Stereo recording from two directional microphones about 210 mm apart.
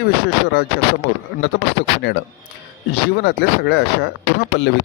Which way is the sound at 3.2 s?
50° left (ahead or behind).